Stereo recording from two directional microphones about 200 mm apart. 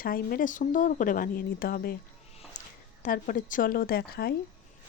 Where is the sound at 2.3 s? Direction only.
30° left (ahead or behind).